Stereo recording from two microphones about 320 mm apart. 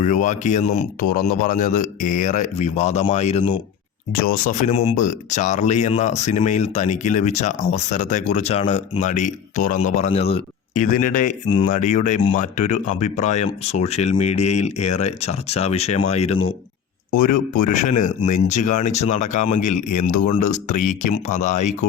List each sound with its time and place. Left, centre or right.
0.0 s speech: left
17.3 s speech: left
17.7 s speech: left
19.7 s speech: left
20.3 s speech: left